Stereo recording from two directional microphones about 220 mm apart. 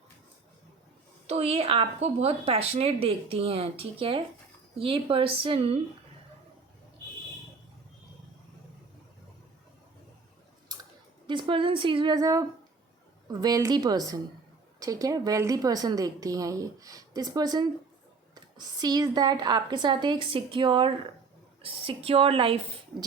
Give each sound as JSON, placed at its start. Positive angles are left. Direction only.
{"t": 1.3, "sound": "speech", "side_deg": -30}
{"t": 10.7, "sound": "chewing", "side_deg": -20}
{"t": 11.3, "sound": "a woman's voice", "side_deg": -20}